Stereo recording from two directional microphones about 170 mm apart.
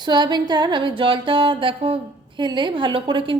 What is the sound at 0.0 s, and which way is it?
A woman's voice, 25° right (ahead or behind).